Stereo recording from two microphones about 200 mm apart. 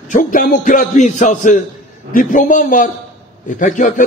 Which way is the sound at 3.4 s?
40° left (ahead or behind).